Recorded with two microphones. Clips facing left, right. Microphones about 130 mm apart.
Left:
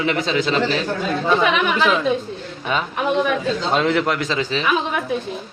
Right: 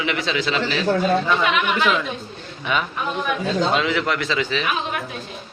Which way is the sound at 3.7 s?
45° left (ahead or behind).